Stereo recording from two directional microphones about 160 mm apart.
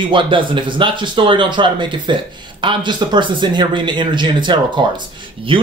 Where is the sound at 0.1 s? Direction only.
30° right (ahead or behind).